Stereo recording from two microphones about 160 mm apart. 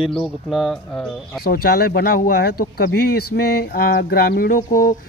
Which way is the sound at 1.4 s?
70° left (ahead or behind).